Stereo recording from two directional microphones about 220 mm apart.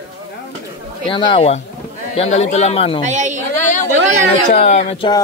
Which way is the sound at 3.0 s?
35° right (ahead or behind).